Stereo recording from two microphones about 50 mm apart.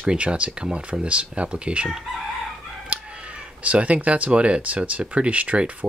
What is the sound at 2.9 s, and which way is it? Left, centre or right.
Crowing, right.